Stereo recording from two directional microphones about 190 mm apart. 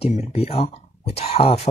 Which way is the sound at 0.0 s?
35° left (ahead or behind).